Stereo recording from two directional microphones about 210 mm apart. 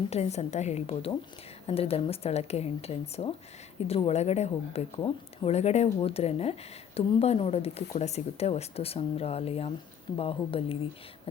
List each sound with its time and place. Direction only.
0.1 s a woman's voice: 30° left (ahead or behind)